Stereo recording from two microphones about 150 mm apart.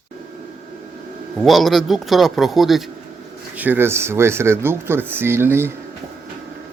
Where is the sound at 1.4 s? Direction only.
Centre (ahead or behind).